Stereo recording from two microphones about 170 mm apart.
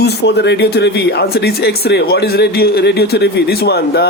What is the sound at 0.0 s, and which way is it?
Speech, 80° left.